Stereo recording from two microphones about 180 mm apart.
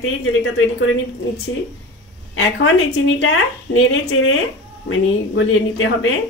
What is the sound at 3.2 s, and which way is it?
Speech, 90° left.